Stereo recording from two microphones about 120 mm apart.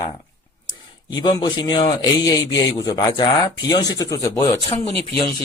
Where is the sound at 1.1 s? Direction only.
35° left (ahead or behind).